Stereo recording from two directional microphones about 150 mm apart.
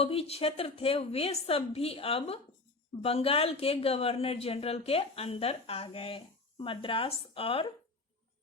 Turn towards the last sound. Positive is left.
turn(degrees=40)  # may be behind; listen again after turning